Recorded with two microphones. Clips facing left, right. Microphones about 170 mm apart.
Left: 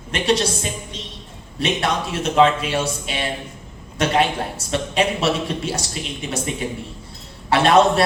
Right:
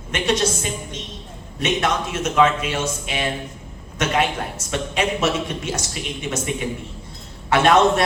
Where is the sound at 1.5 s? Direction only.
35° left (ahead or behind).